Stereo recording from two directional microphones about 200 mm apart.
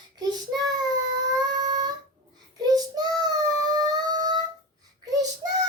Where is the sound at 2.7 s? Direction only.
20° right (ahead or behind).